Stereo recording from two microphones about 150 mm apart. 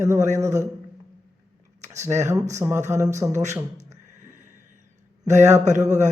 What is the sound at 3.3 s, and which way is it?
Speech, 50° right (ahead or behind).